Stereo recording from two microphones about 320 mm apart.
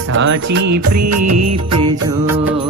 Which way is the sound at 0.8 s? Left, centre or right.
Right.